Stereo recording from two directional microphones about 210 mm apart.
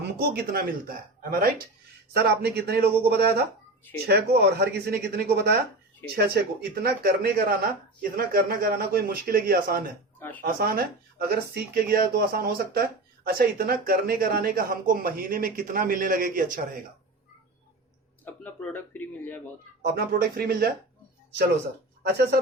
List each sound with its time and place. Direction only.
0.2 s speech: 45° right (ahead or behind)
6.8 s speech: 50° right (ahead or behind)
10.2 s speech: 10° left (ahead or behind)
10.4 s speech: 45° right (ahead or behind)
18.3 s speech: 10° left (ahead or behind)
19.8 s speech: 45° right (ahead or behind)
22.0 s speech: 50° right (ahead or behind)